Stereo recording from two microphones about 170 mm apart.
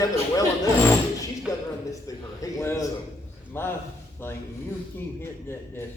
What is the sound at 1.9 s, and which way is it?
A man's voice, 20° left (ahead or behind).